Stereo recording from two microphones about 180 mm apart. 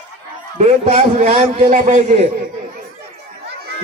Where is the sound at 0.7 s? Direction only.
35° right (ahead or behind).